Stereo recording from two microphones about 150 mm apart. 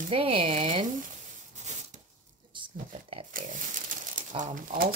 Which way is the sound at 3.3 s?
60° right (ahead or behind).